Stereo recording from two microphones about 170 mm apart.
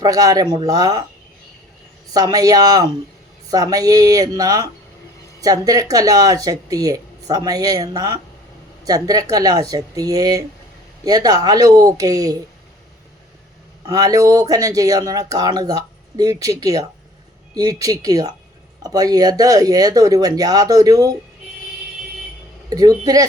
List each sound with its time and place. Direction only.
0.0 s speech: 20° right (ahead or behind)
2.1 s speech: 20° right (ahead or behind)
13.8 s speech: 20° right (ahead or behind)
22.7 s speech: 20° right (ahead or behind)